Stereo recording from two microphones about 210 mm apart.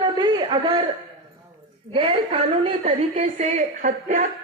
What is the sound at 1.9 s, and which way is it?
A woman's voice, 25° right (ahead or behind).